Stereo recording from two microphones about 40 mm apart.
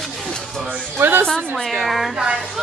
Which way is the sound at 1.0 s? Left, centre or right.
Right.